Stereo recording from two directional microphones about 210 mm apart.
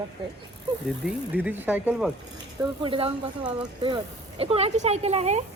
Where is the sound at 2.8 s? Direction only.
25° right (ahead or behind).